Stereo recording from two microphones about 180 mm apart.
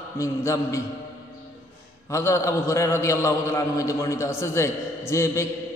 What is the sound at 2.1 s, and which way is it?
A man's voice, 15° left (ahead or behind).